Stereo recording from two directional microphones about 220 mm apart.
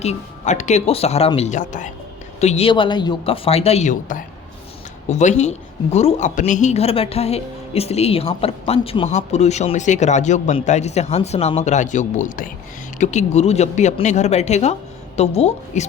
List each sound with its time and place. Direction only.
0.0 s speech: 30° left (ahead or behind)